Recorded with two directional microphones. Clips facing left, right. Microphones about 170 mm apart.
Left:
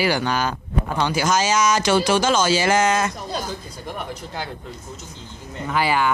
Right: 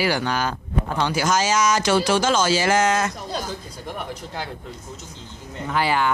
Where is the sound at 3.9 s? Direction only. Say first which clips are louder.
Left 1 dB; centre (ahead or behind).